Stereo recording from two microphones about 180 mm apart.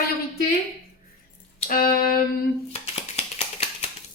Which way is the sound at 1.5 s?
45° left (ahead or behind).